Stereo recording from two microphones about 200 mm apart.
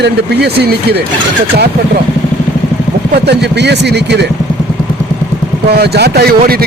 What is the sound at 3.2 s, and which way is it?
Speech, 55° right (ahead or behind).